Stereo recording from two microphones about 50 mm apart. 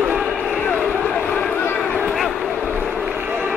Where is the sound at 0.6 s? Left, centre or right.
Left.